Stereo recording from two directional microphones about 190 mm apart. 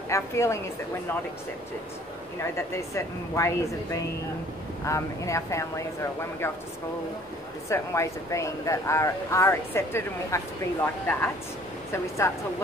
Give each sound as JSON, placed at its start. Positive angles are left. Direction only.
{"t": 0.1, "sound": "speech", "side_deg": 15}
{"t": 2.4, "sound": "speech", "side_deg": 15}
{"t": 7.7, "sound": "speech", "side_deg": 15}